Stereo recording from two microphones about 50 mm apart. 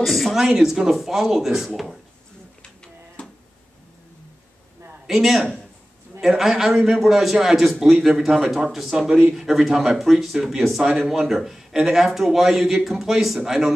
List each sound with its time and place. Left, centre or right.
0.0 s a man's voice: centre
2.6 s a sound: centre
5.0 s a man's voice: centre